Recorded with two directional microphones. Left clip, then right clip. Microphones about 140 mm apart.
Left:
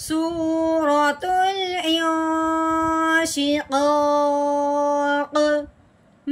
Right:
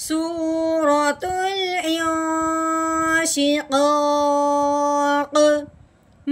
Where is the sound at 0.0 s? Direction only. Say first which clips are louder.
Even; 25° right (ahead or behind).